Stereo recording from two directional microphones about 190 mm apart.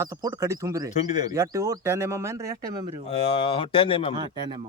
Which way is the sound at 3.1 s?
30° left (ahead or behind).